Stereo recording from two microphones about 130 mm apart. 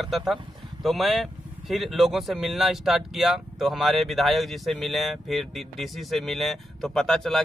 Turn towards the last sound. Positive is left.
turn(degrees=5)  # may be behind; listen again after turning